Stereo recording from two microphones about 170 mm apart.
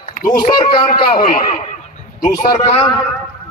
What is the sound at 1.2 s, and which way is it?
A man's voice, 55° left (ahead or behind).